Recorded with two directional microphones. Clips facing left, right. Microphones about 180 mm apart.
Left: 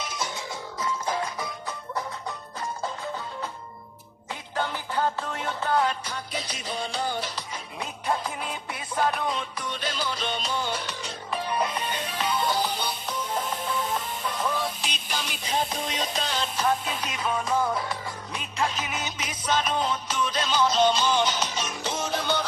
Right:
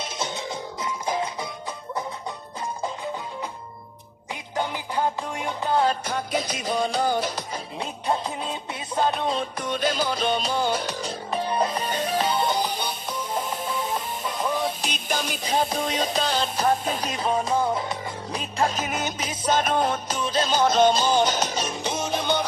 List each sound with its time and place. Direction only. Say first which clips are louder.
0.0 s music: right 3 dB; 25° right (ahead or behind)
4.5 s music: right 2 dB; 15° right (ahead or behind)
6.1 s music: right 7 dB; 45° right (ahead or behind)
7.8 s music: right 2 dB; 25° right (ahead or behind)
9.6 s music: right 7 dB; 45° right (ahead or behind)
11.3 s music: right 3 dB; 30° right (ahead or behind)
12.4 s music: right 2 dB; 20° right (ahead or behind)
14.8 s music: right 5 dB; 50° right (ahead or behind); by 17.9 s 25° right (ahead or behind)
18.3 s music: right 4 dB; 35° right (ahead or behind); by 20.1 s 55° right (ahead or behind)
20.1 s music: right 3 dB; 35° right (ahead or behind)
20.5 s music: right 3 dB; 50° right (ahead or behind)
21.8 s music: right 2 dB; 15° right (ahead or behind)